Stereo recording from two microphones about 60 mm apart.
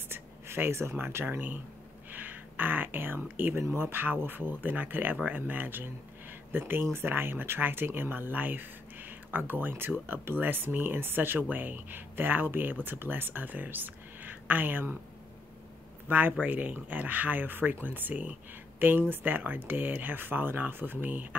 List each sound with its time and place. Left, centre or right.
0.1 s speech: right
6.6 s speech: right
16.1 s speech: right